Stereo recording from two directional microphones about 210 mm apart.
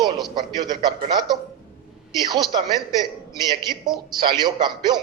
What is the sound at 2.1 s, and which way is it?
A man's voice, 20° right (ahead or behind).